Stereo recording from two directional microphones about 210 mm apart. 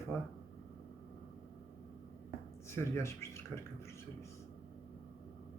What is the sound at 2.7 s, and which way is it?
Speech, 15° left (ahead or behind).